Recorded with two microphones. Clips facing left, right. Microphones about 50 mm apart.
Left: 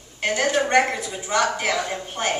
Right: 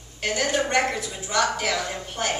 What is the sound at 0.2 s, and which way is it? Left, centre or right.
A woman's voice, centre.